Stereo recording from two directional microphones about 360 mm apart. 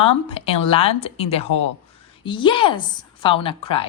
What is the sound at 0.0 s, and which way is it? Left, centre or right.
Speech, centre.